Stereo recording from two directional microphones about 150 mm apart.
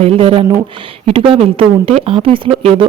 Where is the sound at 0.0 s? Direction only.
40° right (ahead or behind).